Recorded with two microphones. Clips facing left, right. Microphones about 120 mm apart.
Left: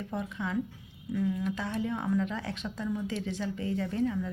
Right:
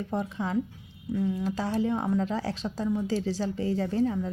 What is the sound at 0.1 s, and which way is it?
A woman's voice, 35° right (ahead or behind).